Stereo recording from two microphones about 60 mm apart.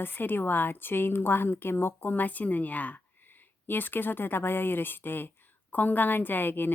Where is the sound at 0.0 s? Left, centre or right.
Left.